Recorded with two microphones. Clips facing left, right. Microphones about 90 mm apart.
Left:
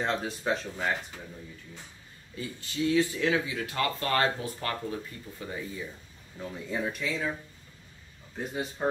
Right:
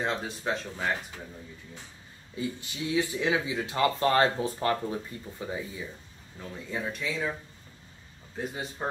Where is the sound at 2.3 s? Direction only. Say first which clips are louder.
Right 1 dB; 20° right (ahead or behind).